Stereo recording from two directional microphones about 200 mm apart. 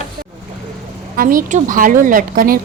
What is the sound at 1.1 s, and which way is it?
A woman's voice, 45° right (ahead or behind).